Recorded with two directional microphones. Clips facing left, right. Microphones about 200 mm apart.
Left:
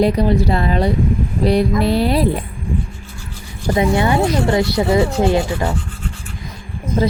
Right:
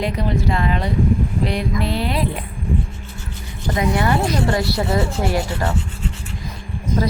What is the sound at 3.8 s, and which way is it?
Speech, 25° left (ahead or behind).